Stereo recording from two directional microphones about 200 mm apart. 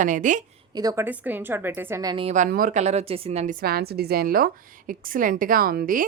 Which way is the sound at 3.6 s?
50° right (ahead or behind).